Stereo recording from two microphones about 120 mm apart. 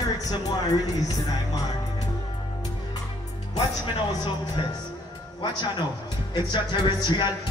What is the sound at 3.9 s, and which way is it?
Speech, 35° left (ahead or behind).